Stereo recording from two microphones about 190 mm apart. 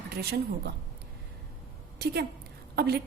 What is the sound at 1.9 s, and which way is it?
A woman's voice, 60° right (ahead or behind).